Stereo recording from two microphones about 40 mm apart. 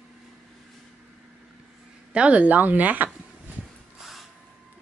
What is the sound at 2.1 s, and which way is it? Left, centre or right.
Speech, right.